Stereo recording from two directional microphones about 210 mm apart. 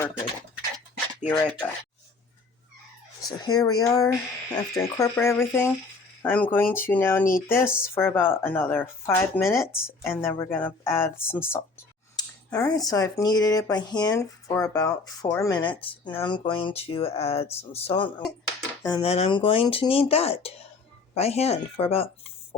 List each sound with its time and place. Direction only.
1.3 s speech: 5° left (ahead or behind)
3.2 s speech: 20° left (ahead or behind)
19.0 s speech: 30° left (ahead or behind)